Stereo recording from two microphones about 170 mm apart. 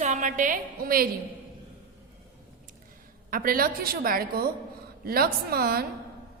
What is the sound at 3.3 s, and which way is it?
A woman's voice, 55° right (ahead or behind).